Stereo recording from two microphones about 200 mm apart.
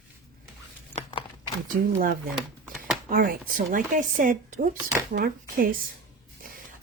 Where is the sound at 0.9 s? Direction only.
30° left (ahead or behind).